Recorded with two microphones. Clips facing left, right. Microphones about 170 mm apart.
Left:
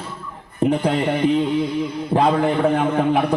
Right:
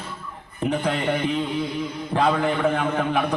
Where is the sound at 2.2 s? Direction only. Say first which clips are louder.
Left 4 dB; 30° left (ahead or behind).